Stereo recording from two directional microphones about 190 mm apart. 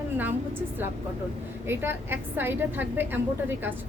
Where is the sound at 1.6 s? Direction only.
10° right (ahead or behind).